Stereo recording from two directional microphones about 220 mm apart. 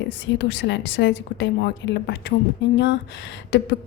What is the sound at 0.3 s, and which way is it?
A woman's voice, 55° left (ahead or behind).